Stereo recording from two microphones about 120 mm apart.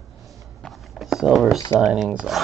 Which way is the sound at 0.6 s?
Centre (ahead or behind).